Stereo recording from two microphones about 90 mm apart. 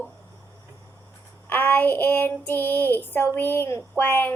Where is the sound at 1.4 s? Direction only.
20° left (ahead or behind).